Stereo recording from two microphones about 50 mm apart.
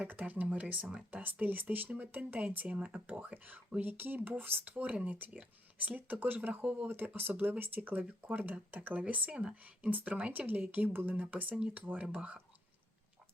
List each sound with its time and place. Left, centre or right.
0.1 s speech: right
2.6 s speech: right
6.0 s speech: right
10.7 s speech: right
11.5 s speech: right